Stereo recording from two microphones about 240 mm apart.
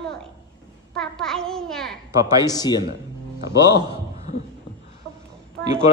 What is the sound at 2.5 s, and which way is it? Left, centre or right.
Speech, centre.